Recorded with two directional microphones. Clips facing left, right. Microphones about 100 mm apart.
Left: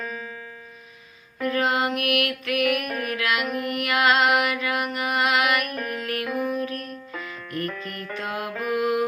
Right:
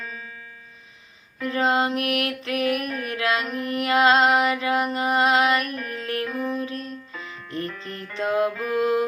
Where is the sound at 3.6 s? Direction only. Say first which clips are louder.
Right 4 dB; 30° right (ahead or behind).